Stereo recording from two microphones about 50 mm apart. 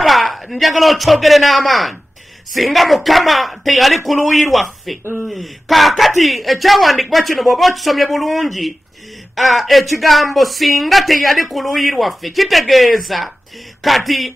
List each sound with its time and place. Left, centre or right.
0.0 s a man's voice: centre
5.0 s speech: right
5.3 s speech: centre